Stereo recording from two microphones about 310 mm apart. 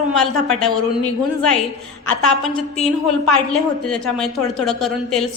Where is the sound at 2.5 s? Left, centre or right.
Centre.